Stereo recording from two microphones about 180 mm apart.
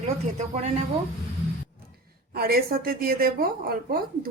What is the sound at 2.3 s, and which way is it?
A woman's voice, 60° right (ahead or behind).